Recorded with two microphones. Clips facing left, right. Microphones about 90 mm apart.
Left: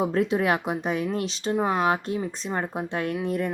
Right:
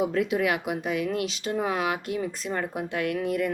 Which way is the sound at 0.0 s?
35° left (ahead or behind).